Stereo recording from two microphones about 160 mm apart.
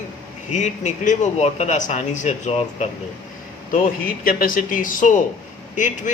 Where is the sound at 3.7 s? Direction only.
60° left (ahead or behind).